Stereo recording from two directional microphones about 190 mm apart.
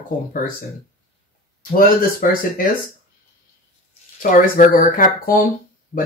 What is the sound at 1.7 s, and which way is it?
Speech, 45° left (ahead or behind).